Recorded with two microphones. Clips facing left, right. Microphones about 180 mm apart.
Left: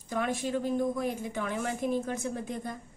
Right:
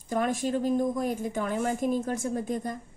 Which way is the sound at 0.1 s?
45° right (ahead or behind).